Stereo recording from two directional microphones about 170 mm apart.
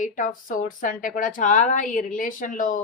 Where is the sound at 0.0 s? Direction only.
50° left (ahead or behind).